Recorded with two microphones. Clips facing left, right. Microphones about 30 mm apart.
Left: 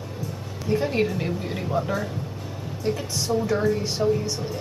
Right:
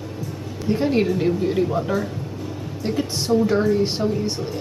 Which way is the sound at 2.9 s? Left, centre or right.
Right.